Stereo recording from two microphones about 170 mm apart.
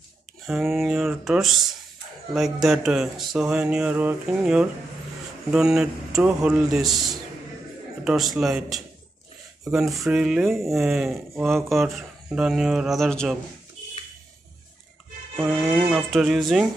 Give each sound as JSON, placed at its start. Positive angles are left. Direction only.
{"t": 0.5, "sound": "speech", "side_deg": 0}
{"t": 8.0, "sound": "speech", "side_deg": 0}
{"t": 15.5, "sound": "speech", "side_deg": 0}